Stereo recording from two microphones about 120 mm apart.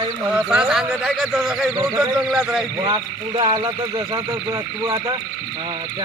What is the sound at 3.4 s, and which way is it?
Speech, 40° right (ahead or behind).